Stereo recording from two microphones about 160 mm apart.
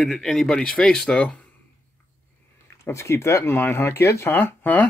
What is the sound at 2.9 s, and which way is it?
Speech, 15° left (ahead or behind).